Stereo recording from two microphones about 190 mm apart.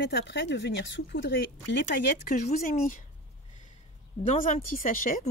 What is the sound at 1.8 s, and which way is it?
Speech, 45° left (ahead or behind).